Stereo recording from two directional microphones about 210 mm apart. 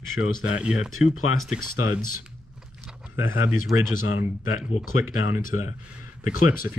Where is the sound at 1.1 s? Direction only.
85° left.